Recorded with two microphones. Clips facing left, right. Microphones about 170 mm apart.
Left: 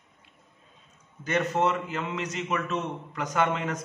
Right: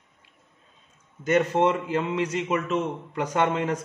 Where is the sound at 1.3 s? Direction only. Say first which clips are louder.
Right 4 dB; 30° right (ahead or behind).